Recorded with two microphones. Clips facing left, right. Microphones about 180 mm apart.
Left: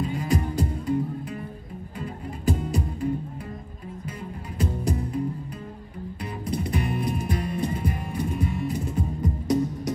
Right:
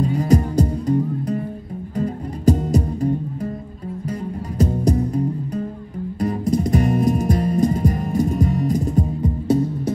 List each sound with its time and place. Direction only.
0.0 s music: 40° right (ahead or behind)
4.6 s music: 40° right (ahead or behind)
9.2 s music: 30° right (ahead or behind)